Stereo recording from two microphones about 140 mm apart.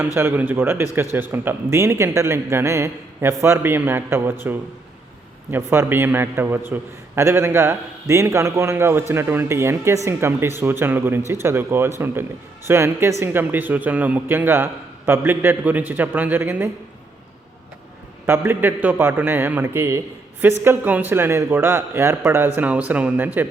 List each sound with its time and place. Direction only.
0.2 s a man's voice: 15° right (ahead or behind)
5.5 s a man's voice: 15° right (ahead or behind)
18.3 s a man's voice: 15° right (ahead or behind)